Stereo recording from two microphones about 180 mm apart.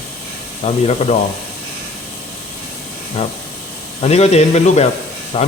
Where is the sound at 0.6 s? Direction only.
35° left (ahead or behind).